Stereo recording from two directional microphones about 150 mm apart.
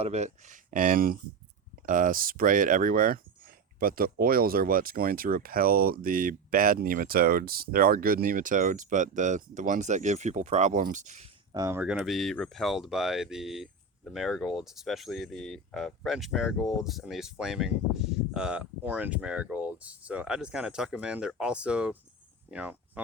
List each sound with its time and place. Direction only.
0.0 s speech: 45° right (ahead or behind)
11.5 s speech: 25° right (ahead or behind)
11.9 s speech: centre (ahead or behind)